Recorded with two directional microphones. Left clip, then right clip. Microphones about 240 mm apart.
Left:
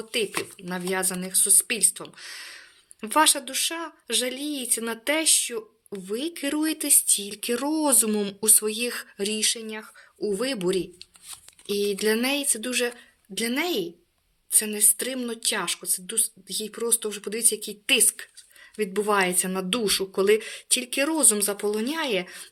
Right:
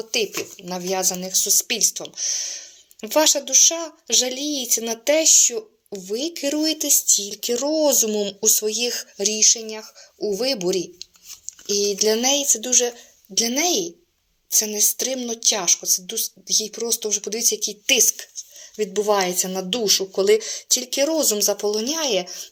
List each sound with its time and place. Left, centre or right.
0.0 s speech: centre